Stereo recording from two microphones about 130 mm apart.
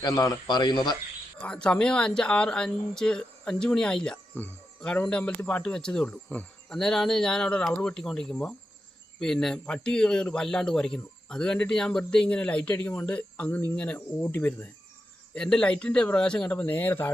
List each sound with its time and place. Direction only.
0.0 s a man's voice: 30° left (ahead or behind)
1.4 s a man's voice: 5° left (ahead or behind)